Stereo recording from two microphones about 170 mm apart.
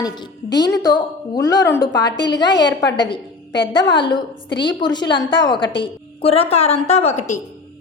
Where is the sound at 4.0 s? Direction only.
25° left (ahead or behind); by 7.4 s 45° left (ahead or behind).